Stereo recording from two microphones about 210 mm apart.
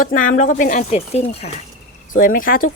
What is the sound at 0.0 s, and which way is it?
Speech, 40° left (ahead or behind).